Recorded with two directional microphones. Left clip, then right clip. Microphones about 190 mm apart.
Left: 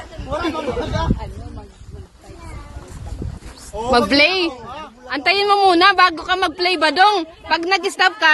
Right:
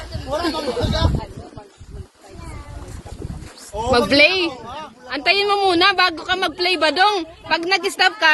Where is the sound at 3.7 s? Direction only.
5° right (ahead or behind).